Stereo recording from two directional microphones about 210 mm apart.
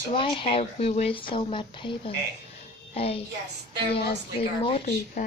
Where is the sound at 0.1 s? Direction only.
25° left (ahead or behind).